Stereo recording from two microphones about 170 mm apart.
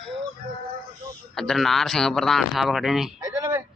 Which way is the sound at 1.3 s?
Centre (ahead or behind).